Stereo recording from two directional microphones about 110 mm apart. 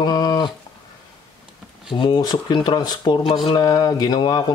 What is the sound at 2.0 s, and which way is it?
Speech, 40° left (ahead or behind).